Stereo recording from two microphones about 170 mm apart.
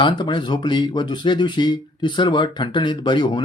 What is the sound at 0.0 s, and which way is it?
Speech, 30° left (ahead or behind).